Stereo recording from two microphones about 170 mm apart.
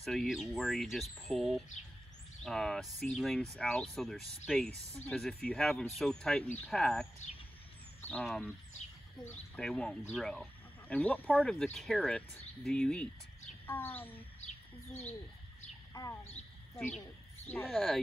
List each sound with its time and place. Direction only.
0.0 s a child's voice: centre (ahead or behind)
15.9 s speech: 20° left (ahead or behind)
16.4 s a sound: 40° left (ahead or behind)
17.6 s speech: centre (ahead or behind)